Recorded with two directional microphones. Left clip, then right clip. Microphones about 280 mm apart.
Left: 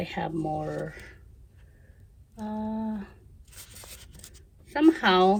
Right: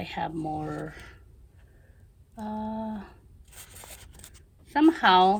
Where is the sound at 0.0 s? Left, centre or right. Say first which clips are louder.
Left 1 dB; centre.